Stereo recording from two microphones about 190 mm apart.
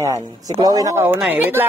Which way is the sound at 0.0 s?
15° right (ahead or behind).